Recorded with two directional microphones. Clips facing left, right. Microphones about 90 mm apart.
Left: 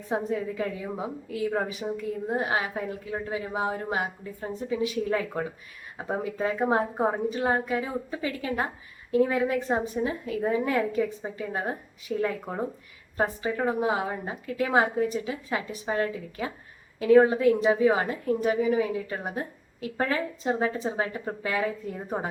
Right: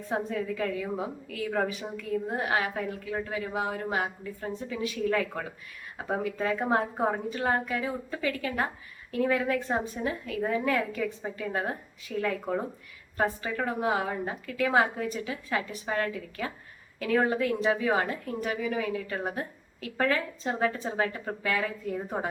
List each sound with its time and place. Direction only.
0.1 s a woman's voice: 20° left (ahead or behind)